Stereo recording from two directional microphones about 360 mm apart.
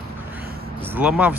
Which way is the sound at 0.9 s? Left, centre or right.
Centre.